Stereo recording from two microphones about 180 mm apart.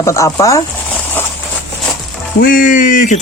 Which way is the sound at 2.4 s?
50° left (ahead or behind).